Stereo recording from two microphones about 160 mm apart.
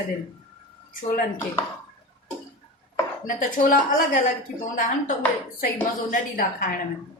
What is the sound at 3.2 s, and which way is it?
A woman's voice, 65° left (ahead or behind).